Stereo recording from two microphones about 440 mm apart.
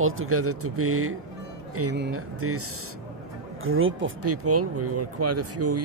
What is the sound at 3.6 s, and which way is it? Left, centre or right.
Speech, right.